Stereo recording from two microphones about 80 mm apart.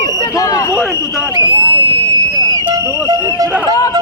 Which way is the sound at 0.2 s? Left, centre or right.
Left.